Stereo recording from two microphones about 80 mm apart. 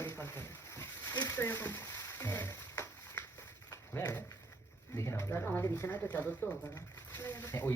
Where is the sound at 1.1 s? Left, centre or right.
Left.